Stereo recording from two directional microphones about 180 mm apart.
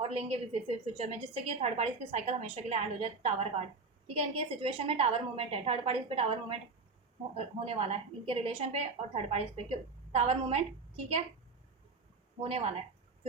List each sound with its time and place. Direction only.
0.0 s a woman's voice: 35° right (ahead or behind)
12.4 s a woman's voice: 35° right (ahead or behind)